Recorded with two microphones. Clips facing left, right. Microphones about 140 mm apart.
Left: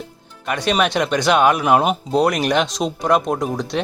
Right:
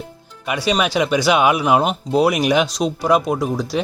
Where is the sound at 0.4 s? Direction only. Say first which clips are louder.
Even; 5° right (ahead or behind).